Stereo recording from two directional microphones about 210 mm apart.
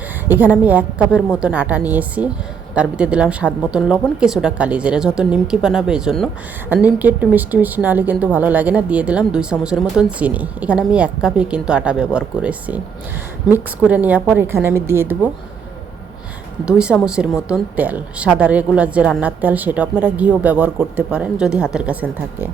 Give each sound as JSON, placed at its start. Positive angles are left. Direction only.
{"t": 0.3, "sound": "a woman's voice", "side_deg": -10}
{"t": 16.6, "sound": "speech", "side_deg": -5}